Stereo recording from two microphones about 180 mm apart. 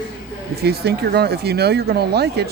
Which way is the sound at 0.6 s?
60° right (ahead or behind).